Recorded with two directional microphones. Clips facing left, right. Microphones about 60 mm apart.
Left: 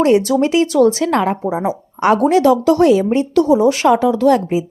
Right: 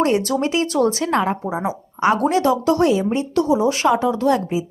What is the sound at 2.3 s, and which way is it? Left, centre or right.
Speech, right.